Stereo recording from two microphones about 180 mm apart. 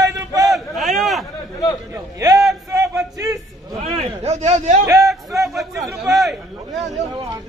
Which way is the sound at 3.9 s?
35° right (ahead or behind).